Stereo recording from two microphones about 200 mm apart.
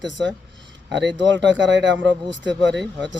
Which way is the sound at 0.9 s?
65° right (ahead or behind).